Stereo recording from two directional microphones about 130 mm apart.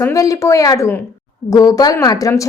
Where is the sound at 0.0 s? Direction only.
25° left (ahead or behind).